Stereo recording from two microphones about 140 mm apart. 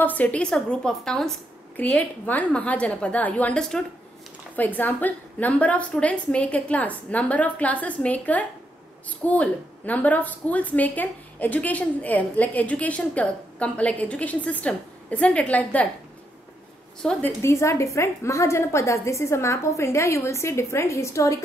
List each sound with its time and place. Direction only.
0.0 s a woman's voice: 10° left (ahead or behind)
17.0 s a woman's voice: 5° left (ahead or behind)
17.4 s a woman's voice: 20° left (ahead or behind)